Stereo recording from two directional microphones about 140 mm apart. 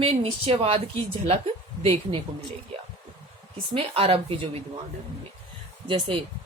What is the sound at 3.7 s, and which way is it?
Speech, 40° right (ahead or behind).